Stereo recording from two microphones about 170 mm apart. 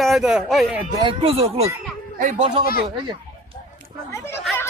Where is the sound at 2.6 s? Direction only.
60° left (ahead or behind).